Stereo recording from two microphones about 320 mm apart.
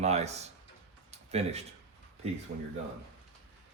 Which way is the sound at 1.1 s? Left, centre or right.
Centre.